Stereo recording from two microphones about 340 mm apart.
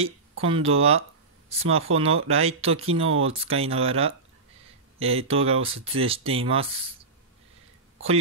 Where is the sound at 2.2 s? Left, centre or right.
Centre.